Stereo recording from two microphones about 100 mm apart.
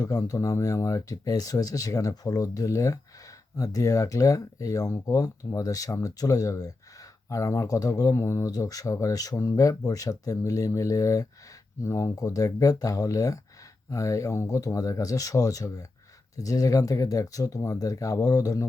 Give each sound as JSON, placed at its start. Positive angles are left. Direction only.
{"t": 0.0, "sound": "speech", "side_deg": 35}